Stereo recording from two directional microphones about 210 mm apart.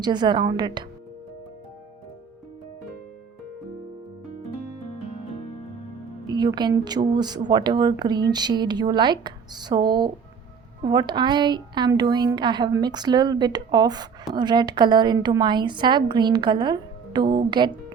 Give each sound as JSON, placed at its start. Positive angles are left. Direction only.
{"t": 0.0, "sound": "a woman's voice", "side_deg": -20}
{"t": 6.2, "sound": "a woman's voice", "side_deg": -20}